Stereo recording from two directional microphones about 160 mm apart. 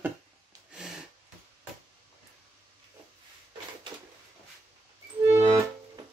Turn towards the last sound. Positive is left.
turn(degrees=-15)  # may be behind; listen again after turning